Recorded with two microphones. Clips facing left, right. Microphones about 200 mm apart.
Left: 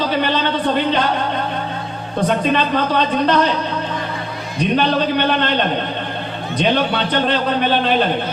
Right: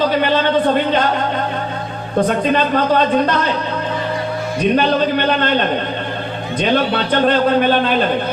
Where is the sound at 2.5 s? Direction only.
45° right (ahead or behind).